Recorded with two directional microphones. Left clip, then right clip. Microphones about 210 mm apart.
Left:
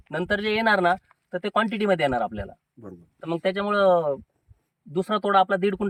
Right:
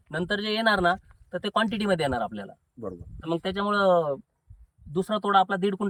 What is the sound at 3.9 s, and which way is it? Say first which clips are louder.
Speech: left 1 dB; 15° left (ahead or behind).